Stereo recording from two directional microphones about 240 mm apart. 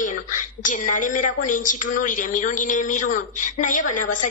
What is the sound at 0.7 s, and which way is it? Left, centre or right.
A woman's voice, left.